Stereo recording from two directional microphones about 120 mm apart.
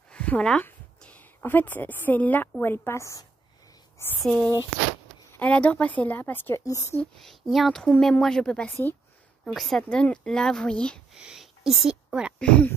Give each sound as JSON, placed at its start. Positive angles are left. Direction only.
{"t": 0.1, "sound": "a sound", "side_deg": 10}
{"t": 0.7, "sound": "a woman's voice", "side_deg": 15}
{"t": 4.2, "sound": "speech", "side_deg": 5}
{"t": 6.6, "sound": "speech", "side_deg": 25}
{"t": 7.2, "sound": "speech", "side_deg": 0}
{"t": 11.1, "sound": "speech", "side_deg": -5}
{"t": 12.4, "sound": "speech", "side_deg": 10}